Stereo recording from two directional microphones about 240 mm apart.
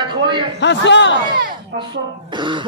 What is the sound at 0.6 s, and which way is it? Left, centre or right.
Speech, left.